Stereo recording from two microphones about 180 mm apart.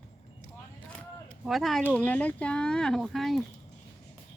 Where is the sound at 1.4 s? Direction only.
Centre (ahead or behind).